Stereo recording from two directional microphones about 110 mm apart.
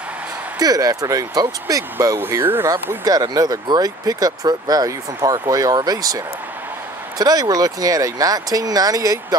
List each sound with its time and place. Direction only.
0.6 s speech: 35° right (ahead or behind)
2.1 s speech: 20° right (ahead or behind)
2.7 s speech: 35° right (ahead or behind)